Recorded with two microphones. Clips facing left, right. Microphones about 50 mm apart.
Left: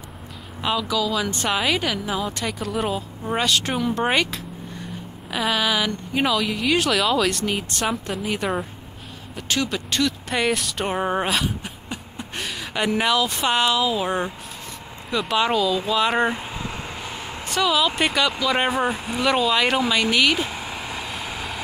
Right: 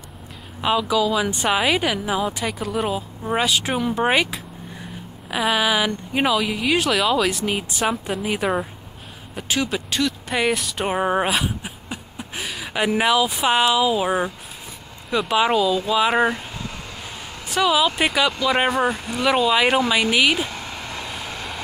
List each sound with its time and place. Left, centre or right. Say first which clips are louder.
0.6 s speech: right 4 dB; centre
16.3 s a sound: right 1 dB; left
17.5 s speech: right 2 dB; centre
18.7 s speech: right 2 dB; centre
19.2 s speech: right 2 dB; centre
20.4 s vehicle: left 1 dB; centre